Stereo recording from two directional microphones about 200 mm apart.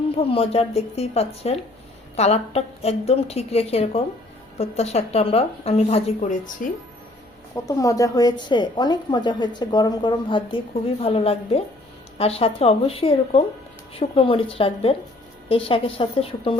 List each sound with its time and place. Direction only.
0.3 s a woman's voice: 30° left (ahead or behind)
7.5 s a woman's voice: 15° left (ahead or behind)